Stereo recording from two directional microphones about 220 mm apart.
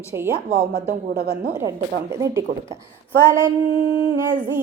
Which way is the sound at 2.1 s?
15° right (ahead or behind).